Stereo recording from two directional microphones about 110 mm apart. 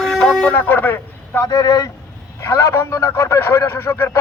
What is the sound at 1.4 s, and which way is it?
A man's voice, 35° left (ahead or behind).